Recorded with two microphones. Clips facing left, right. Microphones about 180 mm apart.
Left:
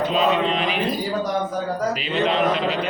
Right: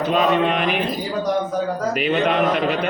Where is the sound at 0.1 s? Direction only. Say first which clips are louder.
Right 6 dB; 55° right (ahead or behind).